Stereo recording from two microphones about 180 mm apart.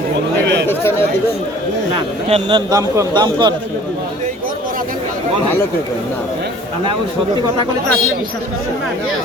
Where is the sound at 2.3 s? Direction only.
25° right (ahead or behind).